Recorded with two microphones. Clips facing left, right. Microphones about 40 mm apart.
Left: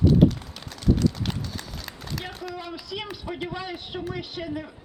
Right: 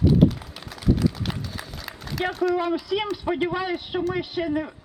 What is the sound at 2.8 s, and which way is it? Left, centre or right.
A man's voice, centre.